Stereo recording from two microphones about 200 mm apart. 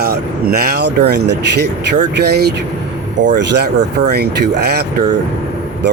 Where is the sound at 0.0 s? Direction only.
50° right (ahead or behind).